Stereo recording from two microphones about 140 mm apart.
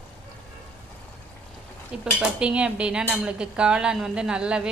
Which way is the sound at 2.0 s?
5° right (ahead or behind).